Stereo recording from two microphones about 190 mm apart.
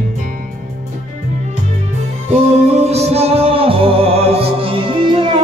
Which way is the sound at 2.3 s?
35° right (ahead or behind).